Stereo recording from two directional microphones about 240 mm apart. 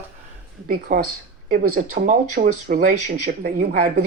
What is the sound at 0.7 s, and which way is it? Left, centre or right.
Speech, right.